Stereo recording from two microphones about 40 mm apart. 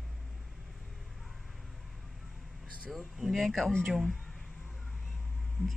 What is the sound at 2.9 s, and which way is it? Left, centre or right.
Speech, centre.